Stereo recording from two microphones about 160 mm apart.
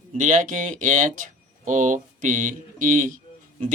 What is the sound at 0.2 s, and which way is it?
Speech, 55° right (ahead or behind).